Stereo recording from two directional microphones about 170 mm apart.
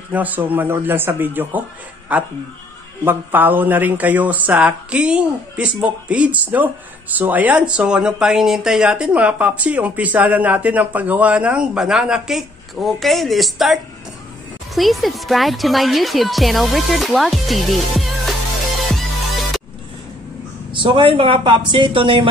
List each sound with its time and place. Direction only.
0.1 s speech: 10° right (ahead or behind)
14.8 s speech: centre (ahead or behind)
20.7 s speech: 30° right (ahead or behind)